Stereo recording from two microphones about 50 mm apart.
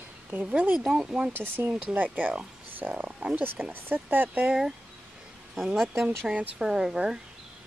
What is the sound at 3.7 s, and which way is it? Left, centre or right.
Speech, right.